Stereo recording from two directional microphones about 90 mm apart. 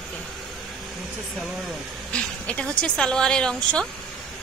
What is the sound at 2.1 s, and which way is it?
Speech, 10° left (ahead or behind).